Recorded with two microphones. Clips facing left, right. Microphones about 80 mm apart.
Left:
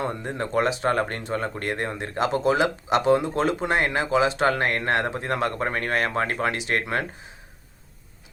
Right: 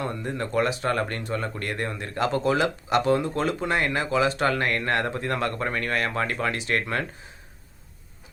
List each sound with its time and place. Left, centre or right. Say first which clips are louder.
0.0 s speech: left 1 dB; left